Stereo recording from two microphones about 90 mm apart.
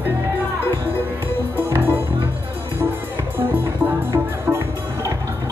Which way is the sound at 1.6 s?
25° right (ahead or behind).